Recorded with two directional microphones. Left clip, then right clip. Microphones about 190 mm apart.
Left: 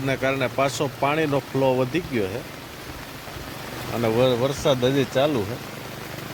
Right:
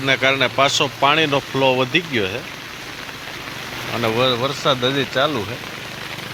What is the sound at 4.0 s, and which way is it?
Speech, 10° left (ahead or behind).